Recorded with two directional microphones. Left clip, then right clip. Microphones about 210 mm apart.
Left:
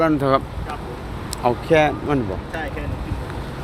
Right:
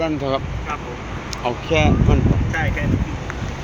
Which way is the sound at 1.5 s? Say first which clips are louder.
Left 3 dB; 40° left (ahead or behind).